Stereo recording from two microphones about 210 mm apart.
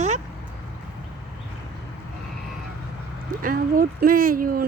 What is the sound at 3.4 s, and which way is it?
Speech, 40° right (ahead or behind).